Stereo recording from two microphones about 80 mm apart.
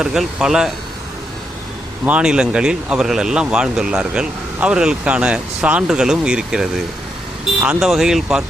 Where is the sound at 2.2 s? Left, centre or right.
Centre.